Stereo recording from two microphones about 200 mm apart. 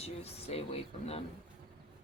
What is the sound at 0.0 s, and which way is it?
Speech, 30° left (ahead or behind).